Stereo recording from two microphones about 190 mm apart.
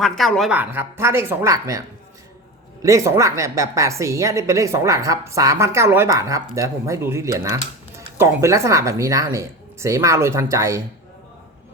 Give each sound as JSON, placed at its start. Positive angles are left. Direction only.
{"t": 0.0, "sound": "a woman's voice", "side_deg": 0}
{"t": 2.8, "sound": "a woman's voice", "side_deg": -15}